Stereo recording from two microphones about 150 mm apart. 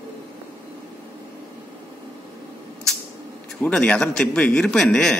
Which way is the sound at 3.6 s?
10° left (ahead or behind).